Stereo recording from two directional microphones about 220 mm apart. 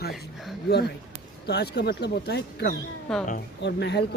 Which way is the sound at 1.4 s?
50° left (ahead or behind).